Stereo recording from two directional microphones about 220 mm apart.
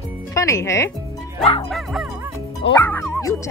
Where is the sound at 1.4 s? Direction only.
25° left (ahead or behind).